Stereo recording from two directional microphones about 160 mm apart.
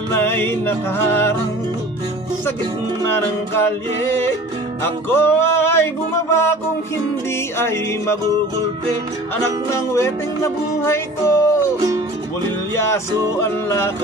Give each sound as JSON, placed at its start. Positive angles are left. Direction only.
{"t": 0.1, "sound": "music", "side_deg": 15}
{"t": 3.0, "sound": "music", "side_deg": 15}
{"t": 4.8, "sound": "music", "side_deg": 15}
{"t": 9.7, "sound": "music", "side_deg": 15}
{"t": 13.4, "sound": "music", "side_deg": 15}